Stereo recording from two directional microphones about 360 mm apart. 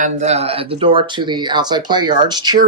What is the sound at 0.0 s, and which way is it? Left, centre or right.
Speech, centre.